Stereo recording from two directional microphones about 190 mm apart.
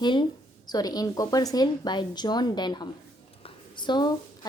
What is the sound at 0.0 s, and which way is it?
A woman's voice, 25° left (ahead or behind).